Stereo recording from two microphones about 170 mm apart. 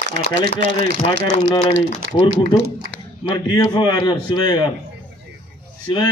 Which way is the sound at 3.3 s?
25° left (ahead or behind).